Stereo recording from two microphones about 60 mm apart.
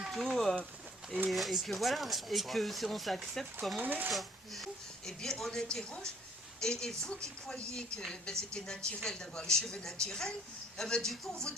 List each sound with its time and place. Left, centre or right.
0.1 s speech: centre
3.8 s speech: right
4.1 s speech: centre